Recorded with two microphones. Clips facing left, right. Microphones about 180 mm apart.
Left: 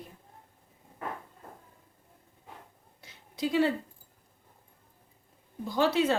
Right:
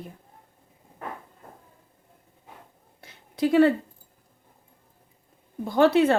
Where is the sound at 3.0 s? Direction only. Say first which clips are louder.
Right 7 dB; 55° right (ahead or behind).